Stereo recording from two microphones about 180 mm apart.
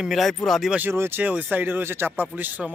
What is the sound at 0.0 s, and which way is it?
Speech, centre (ahead or behind).